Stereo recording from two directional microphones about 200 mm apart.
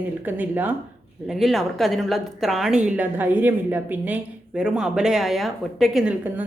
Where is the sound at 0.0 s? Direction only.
10° right (ahead or behind).